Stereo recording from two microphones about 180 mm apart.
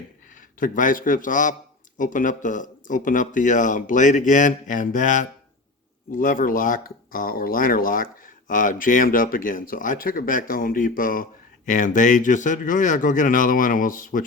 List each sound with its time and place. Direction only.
0.6 s speech: 50° left (ahead or behind)